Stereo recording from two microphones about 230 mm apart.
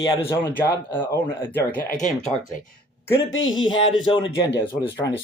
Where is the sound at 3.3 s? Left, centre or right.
Left.